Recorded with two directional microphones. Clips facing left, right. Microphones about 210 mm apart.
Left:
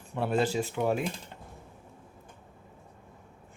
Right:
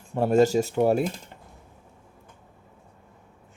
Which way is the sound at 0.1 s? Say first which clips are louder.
Right 8 dB; 45° right (ahead or behind).